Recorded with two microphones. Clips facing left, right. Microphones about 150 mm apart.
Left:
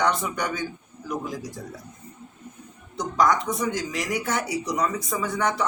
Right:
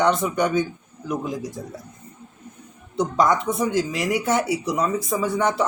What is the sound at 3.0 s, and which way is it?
A man's voice, 25° right (ahead or behind).